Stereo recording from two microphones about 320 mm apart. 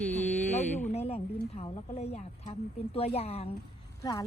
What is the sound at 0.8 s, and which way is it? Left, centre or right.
Speech, left.